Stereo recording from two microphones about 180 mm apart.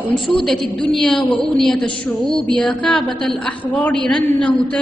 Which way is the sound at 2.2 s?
30° left (ahead or behind).